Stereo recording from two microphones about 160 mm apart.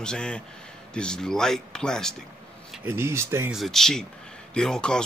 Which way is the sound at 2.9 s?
15° right (ahead or behind).